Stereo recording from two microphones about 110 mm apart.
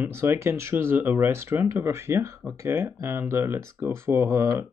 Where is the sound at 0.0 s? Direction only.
20° right (ahead or behind).